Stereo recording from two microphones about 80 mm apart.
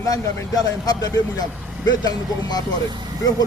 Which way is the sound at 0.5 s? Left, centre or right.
Left.